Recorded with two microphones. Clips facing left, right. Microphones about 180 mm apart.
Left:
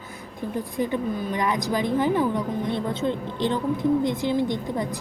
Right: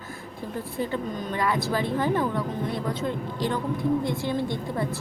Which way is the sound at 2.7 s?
25° left (ahead or behind).